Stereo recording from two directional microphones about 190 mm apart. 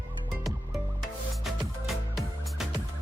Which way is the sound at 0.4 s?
Centre (ahead or behind).